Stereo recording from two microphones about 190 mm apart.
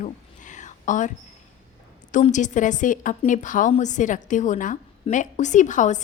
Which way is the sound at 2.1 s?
40° left (ahead or behind).